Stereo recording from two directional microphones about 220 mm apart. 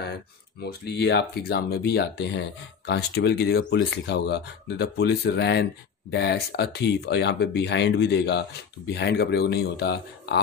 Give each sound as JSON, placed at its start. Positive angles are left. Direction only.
{"t": 0.7, "sound": "speech", "side_deg": 50}